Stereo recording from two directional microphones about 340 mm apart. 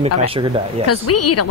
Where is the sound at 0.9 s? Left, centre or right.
Left.